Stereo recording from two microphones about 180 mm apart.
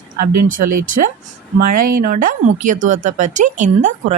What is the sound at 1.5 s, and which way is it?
Speech, 50° right (ahead or behind).